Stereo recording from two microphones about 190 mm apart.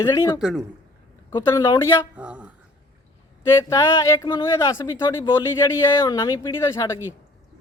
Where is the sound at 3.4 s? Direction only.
15° left (ahead or behind).